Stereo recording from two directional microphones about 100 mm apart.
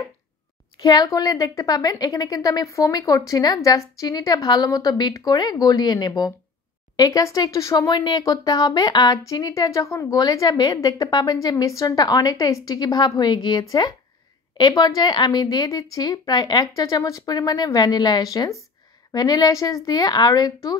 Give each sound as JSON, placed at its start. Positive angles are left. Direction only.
{"t": 0.8, "sound": "a woman's voice", "side_deg": 35}
{"t": 9.2, "sound": "a woman's voice", "side_deg": 35}
{"t": 10.1, "sound": "a woman's voice", "side_deg": 40}